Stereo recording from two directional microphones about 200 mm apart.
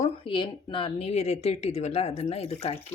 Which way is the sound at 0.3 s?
25° left (ahead or behind).